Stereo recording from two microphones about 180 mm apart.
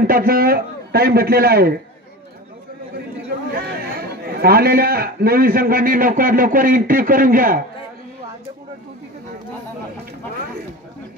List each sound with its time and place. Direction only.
0.0 s a man's voice: 55° right (ahead or behind)
3.5 s a man's voice: 60° right (ahead or behind)